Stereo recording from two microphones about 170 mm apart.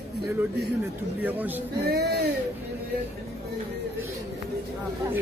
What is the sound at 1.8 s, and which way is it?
Speech, 70° right (ahead or behind).